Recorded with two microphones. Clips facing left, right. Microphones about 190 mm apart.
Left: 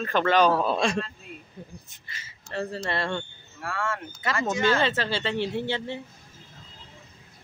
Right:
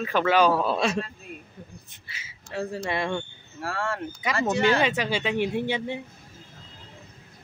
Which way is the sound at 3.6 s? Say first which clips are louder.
Right 1 dB; 35° right (ahead or behind).